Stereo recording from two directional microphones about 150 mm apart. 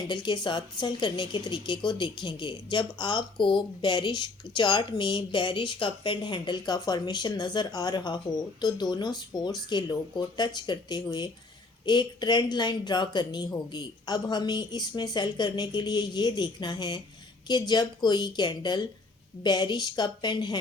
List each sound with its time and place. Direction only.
0.1 s speech: 30° left (ahead or behind)